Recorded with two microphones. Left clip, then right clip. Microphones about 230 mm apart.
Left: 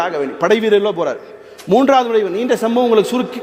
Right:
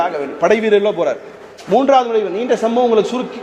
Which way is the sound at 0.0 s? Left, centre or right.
Left.